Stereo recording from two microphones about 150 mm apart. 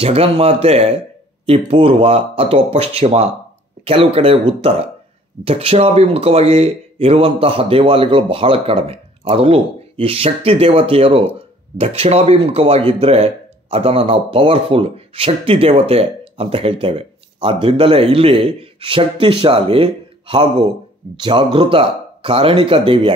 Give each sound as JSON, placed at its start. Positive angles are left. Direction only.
{"t": 0.0, "sound": "speech", "side_deg": -40}